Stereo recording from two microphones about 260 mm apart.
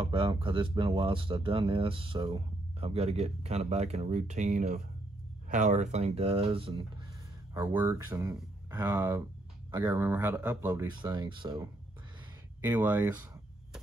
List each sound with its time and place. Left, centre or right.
0.0 s speech: centre
12.6 s speech: centre